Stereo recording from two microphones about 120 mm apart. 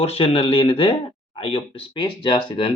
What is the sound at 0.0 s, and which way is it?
Speech, 55° left (ahead or behind).